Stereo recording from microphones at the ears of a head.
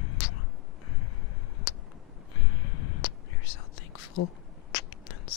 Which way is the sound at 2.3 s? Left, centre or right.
Left.